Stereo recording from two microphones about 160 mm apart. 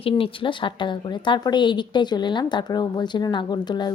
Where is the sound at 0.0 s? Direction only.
35° left (ahead or behind).